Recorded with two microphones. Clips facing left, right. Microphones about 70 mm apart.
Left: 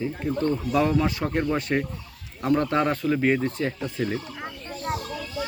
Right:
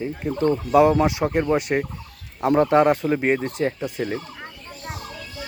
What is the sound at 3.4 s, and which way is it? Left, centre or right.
Speech, centre.